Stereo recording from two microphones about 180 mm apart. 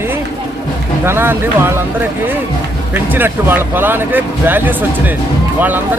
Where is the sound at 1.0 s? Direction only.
10° right (ahead or behind).